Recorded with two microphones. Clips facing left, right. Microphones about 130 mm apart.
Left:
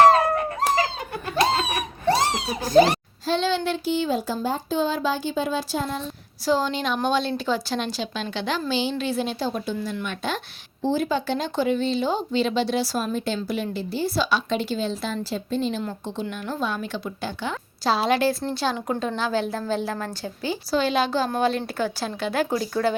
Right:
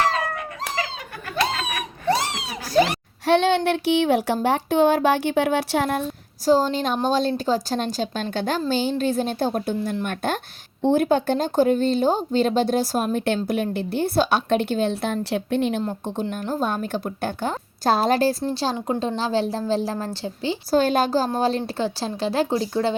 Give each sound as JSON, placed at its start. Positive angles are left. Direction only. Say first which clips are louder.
{"t": 0.0, "sound": "dog", "louder": "left 8 dB", "side_deg": 45}
{"t": 1.4, "sound": "a sound", "louder": "left 2 dB", "side_deg": 30}
{"t": 3.2, "sound": "speech", "louder": "right 5 dB", "side_deg": -65}
{"t": 6.4, "sound": "a woman's voice", "louder": "right 4 dB", "side_deg": -40}
{"t": 16.2, "sound": "a woman's voice", "louder": "right 3 dB", "side_deg": -40}
{"t": 20.7, "sound": "speech", "louder": "right 3 dB", "side_deg": -45}